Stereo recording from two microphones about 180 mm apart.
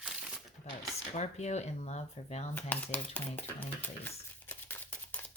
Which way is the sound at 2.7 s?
10° left (ahead or behind).